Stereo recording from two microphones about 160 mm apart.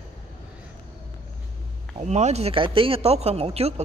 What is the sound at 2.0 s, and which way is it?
Speech, 45° right (ahead or behind).